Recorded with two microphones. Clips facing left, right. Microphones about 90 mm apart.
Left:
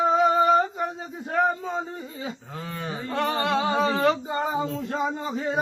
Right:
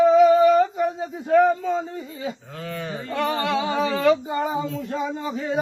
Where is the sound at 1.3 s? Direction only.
35° left (ahead or behind).